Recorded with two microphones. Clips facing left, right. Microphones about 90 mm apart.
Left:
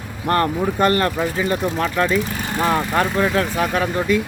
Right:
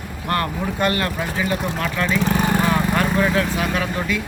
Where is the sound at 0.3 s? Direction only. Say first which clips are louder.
Left 4 dB; 35° left (ahead or behind).